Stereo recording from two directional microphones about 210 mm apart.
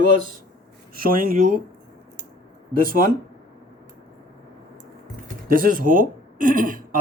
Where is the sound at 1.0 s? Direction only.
45° right (ahead or behind).